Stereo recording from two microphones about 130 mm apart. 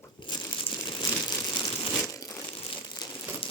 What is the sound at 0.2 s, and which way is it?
Crumpling, 35° left (ahead or behind).